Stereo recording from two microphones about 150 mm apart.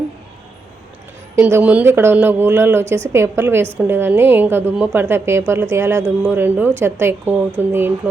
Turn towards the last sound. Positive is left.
turn(degrees=-15)  # may be behind; listen again after turning